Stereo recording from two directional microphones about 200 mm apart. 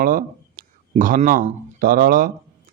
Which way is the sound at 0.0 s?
45° right (ahead or behind).